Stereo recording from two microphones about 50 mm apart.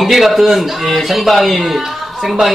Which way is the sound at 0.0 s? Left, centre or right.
Centre.